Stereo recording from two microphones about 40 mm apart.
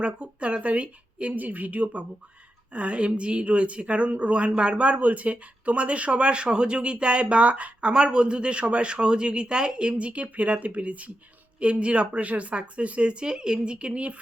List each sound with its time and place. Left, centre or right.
0.0 s a woman's voice: right
9.9 s a woman's voice: right